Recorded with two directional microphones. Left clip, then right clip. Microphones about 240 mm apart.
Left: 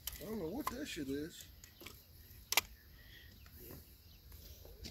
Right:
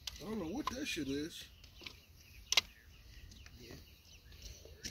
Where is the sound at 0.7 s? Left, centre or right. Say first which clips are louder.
Right 3 dB; right.